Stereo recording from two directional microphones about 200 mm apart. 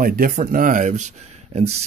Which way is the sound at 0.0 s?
45° right (ahead or behind).